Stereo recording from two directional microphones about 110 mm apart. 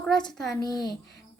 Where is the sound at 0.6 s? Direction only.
40° left (ahead or behind).